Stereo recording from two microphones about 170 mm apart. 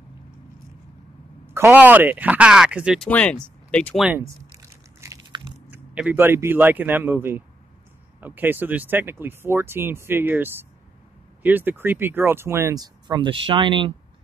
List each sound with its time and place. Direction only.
1.4 s speech: 15° right (ahead or behind)
3.1 s speech: 5° left (ahead or behind)
4.1 s a sound: 15° right (ahead or behind)
5.9 s speech: 10° right (ahead or behind); by 13.9 s 30° right (ahead or behind)